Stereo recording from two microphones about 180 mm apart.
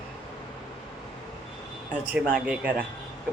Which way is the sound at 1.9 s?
10° right (ahead or behind).